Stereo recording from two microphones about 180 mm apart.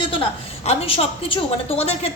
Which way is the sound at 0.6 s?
35° left (ahead or behind).